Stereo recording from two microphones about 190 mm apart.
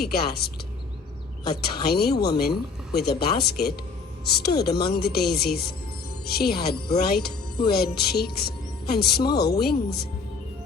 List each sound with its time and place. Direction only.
0.0 s speech: 55° left (ahead or behind)
1.9 s speech: 55° left (ahead or behind)